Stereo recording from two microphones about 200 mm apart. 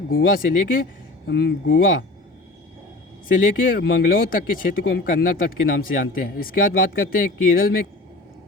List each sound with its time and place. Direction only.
0.1 s speech: 45° left (ahead or behind)
1.3 s speech: 55° left (ahead or behind)
3.2 s speech: 45° left (ahead or behind)